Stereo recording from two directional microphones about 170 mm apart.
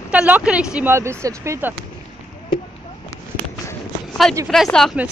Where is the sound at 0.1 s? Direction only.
5° right (ahead or behind).